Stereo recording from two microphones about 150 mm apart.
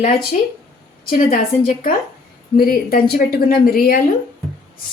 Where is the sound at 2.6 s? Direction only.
85° left.